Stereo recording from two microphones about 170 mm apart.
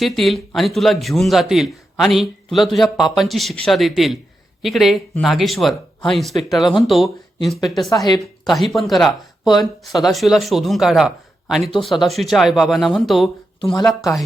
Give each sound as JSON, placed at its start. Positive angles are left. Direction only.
{"t": 0.0, "sound": "a man's voice", "side_deg": 0}
{"t": 7.9, "sound": "a woman's voice", "side_deg": 20}
{"t": 8.4, "sound": "a man's voice", "side_deg": 0}